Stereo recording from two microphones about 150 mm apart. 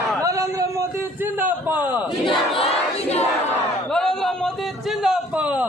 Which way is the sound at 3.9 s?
5° left (ahead or behind).